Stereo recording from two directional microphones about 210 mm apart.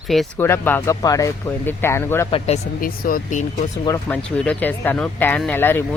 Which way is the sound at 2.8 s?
40° left (ahead or behind).